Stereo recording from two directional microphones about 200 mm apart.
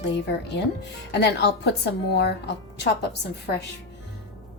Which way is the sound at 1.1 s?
55° left (ahead or behind).